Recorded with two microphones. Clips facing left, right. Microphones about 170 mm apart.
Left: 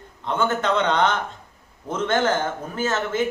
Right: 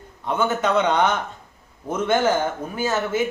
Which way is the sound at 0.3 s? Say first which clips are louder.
Right 1 dB; 10° right (ahead or behind).